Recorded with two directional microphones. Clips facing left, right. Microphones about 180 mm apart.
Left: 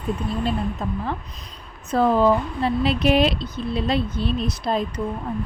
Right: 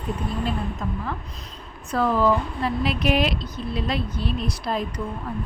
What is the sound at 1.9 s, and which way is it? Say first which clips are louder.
Speech: left 3 dB; 25° left (ahead or behind).